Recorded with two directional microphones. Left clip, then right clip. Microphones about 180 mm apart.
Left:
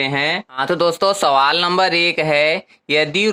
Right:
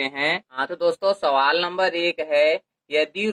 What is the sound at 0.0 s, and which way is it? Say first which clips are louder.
Speech: left 5 dB; 10° left (ahead or behind).